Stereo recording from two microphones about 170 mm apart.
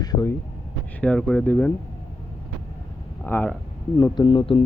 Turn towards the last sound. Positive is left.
turn(degrees=30)  # may be behind; listen again after turning